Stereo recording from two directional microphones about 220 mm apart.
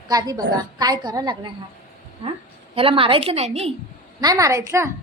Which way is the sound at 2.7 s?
25° right (ahead or behind).